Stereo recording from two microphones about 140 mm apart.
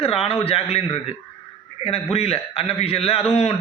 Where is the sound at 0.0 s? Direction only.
45° left (ahead or behind).